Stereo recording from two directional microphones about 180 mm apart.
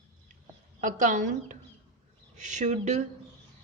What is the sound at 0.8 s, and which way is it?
A woman's voice, 45° right (ahead or behind).